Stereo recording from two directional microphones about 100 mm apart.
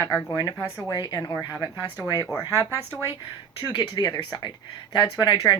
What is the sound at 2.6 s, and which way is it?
Speech, 25° right (ahead or behind).